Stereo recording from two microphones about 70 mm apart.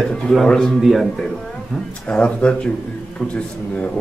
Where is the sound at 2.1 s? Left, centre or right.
Centre.